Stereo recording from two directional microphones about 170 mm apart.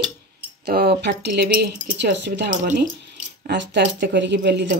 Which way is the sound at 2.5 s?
55° right (ahead or behind).